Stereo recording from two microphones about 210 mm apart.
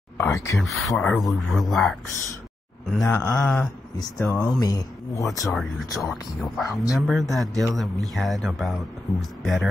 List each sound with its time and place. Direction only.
0.2 s speech: 10° left (ahead or behind)
0.6 s a man's voice: centre (ahead or behind)
3.1 s a man's voice: 10° left (ahead or behind)
4.5 s speech: 20° left (ahead or behind)
5.4 s a man's voice: centre (ahead or behind)